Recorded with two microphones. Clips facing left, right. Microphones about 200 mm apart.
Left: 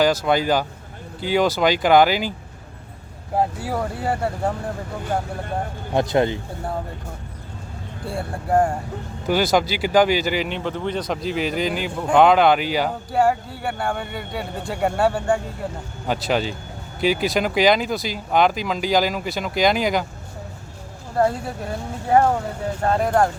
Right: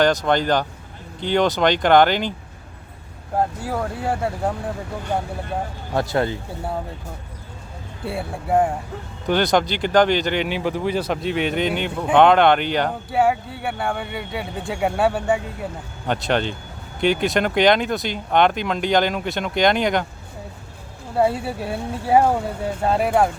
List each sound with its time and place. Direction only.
0.0 s speech: 5° left (ahead or behind)
3.7 s speech: 5° left (ahead or behind)
5.9 s speech: 20° left (ahead or behind)
8.0 s speech: 5° right (ahead or behind)
21.2 s speech: 10° right (ahead or behind)